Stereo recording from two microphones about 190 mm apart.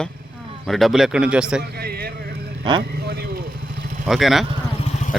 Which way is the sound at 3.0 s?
55° right (ahead or behind).